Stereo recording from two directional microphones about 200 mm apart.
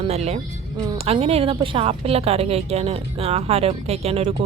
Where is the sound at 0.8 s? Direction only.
20° right (ahead or behind).